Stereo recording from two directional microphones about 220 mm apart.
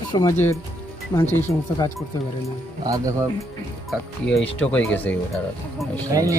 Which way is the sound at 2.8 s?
15° right (ahead or behind).